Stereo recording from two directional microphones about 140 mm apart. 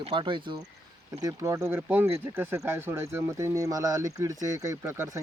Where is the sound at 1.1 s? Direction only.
25° right (ahead or behind).